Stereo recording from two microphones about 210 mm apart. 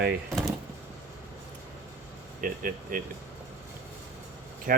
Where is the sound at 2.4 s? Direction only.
40° right (ahead or behind).